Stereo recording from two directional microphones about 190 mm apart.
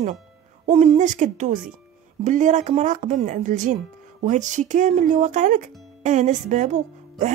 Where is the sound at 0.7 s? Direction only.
35° right (ahead or behind).